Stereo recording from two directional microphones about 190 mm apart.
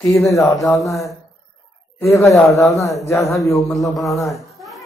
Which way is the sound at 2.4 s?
Centre (ahead or behind).